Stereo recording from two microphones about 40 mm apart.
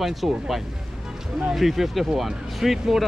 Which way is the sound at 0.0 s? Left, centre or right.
Centre.